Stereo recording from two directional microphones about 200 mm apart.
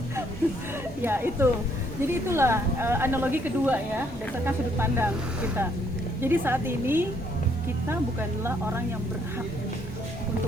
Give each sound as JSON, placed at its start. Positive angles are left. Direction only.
{"t": 1.0, "sound": "a woman's voice", "side_deg": -10}